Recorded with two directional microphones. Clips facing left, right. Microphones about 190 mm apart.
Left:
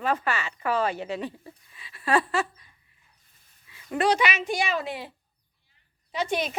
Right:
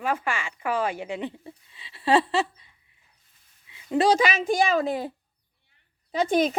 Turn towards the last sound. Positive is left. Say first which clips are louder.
# right 6 dB
turn(degrees=-45)  # may be behind; listen again after turning